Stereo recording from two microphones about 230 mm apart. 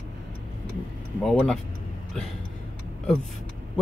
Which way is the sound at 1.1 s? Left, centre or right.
Centre.